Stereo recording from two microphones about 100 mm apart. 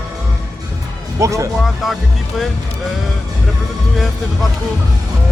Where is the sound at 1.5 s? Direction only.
Centre (ahead or behind).